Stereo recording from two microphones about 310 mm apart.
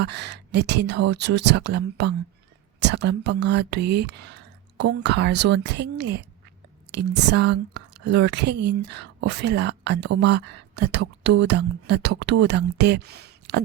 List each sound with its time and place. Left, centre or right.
0.0 s speech: right